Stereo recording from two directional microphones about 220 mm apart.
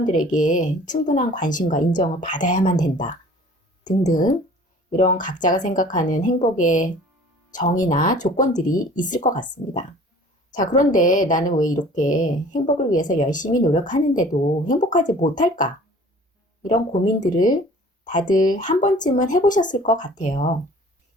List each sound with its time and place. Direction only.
0.0 s speech: 35° left (ahead or behind)
4.9 s speech: 35° left (ahead or behind)